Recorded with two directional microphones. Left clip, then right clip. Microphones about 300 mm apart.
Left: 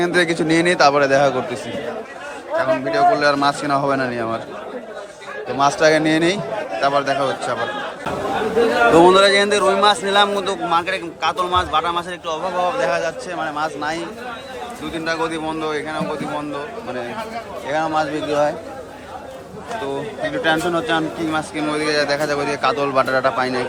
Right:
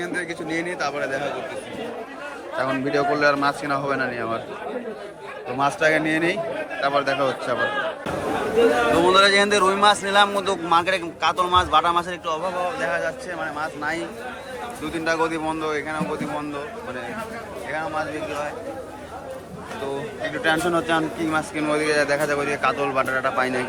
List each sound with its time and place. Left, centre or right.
0.0 s a man's voice: centre
2.6 s a man's voice: centre
5.5 s a man's voice: centre
9.0 s a man's voice: centre
17.7 s a man's voice: centre
19.9 s a man's voice: centre